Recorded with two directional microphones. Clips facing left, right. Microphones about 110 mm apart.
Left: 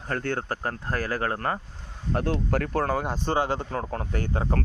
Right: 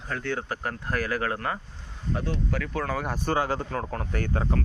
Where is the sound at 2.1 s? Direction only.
60° left (ahead or behind).